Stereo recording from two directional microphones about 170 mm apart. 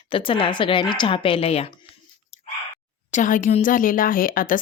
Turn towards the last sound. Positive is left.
turn(degrees=55)  # may be behind; listen again after turning